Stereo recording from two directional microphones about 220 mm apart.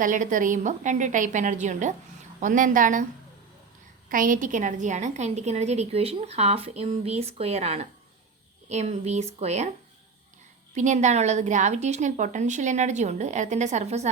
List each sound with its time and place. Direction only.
0.0 s a woman's voice: 35° right (ahead or behind)
4.1 s a woman's voice: 35° right (ahead or behind)
10.8 s a woman's voice: 35° right (ahead or behind)